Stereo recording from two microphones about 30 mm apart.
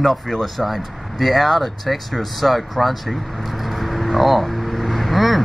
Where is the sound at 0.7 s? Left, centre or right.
Centre.